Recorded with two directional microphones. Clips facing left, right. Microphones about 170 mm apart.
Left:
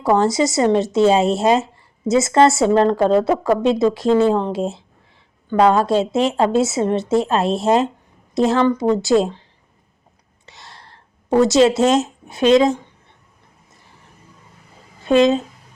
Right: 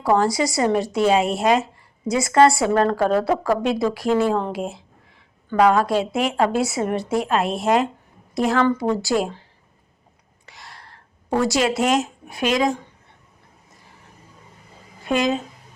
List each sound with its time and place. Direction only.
0.0 s a woman's voice: 20° left (ahead or behind)
10.4 s a sound: 25° left (ahead or behind)
15.0 s a woman's voice: 25° left (ahead or behind)